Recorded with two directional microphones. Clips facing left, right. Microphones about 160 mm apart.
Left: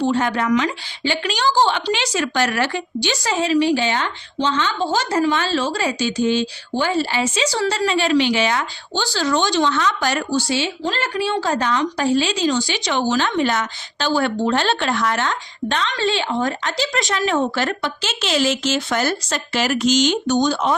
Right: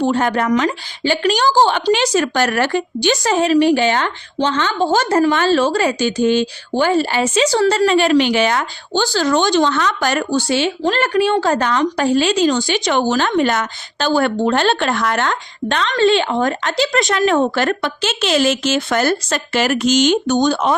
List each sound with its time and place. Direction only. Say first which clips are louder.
0.0 s a woman's voice: right 3 dB; 50° right (ahead or behind)